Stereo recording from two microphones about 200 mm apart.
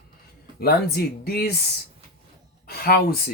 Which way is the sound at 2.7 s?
50° left (ahead or behind).